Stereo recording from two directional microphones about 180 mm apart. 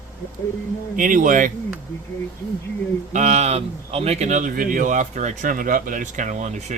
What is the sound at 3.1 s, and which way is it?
A man's voice, 40° right (ahead or behind).